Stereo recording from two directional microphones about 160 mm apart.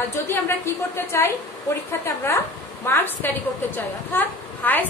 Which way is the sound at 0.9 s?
15° left (ahead or behind).